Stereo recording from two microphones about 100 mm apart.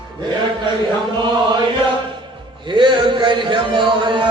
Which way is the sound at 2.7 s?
55° right (ahead or behind).